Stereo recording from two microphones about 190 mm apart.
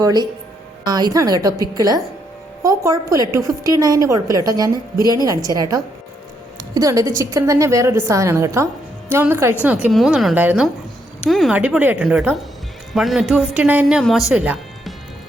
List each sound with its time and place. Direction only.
0.0 s a woman's voice: 20° right (ahead or behind)
6.6 s a woman's voice: 20° right (ahead or behind)